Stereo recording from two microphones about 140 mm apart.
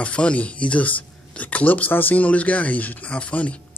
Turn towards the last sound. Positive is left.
turn(degrees=10)  # may be behind; listen again after turning